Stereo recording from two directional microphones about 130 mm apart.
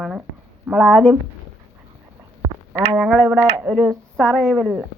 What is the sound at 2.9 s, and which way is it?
Speech, centre (ahead or behind).